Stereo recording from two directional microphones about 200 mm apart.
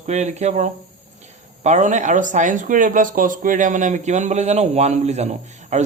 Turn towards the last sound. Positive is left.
turn(degrees=-35)  # may be behind; listen again after turning